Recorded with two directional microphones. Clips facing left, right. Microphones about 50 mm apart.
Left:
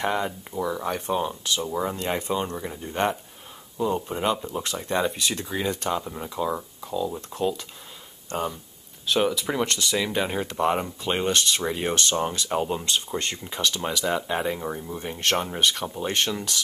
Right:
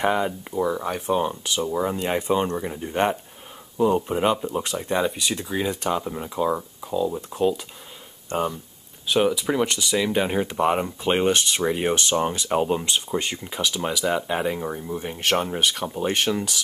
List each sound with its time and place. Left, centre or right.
0.0 s speech: centre
13.1 s speech: centre